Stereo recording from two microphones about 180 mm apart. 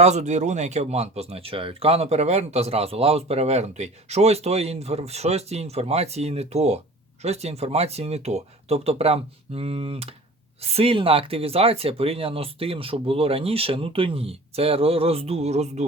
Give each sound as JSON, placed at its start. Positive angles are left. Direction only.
{"t": 0.0, "sound": "speech", "side_deg": -40}